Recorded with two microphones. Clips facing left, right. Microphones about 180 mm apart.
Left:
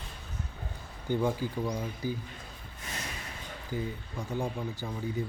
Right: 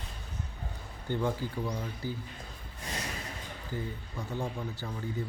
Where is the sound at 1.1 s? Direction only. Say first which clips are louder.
Left 2 dB; 15° left (ahead or behind).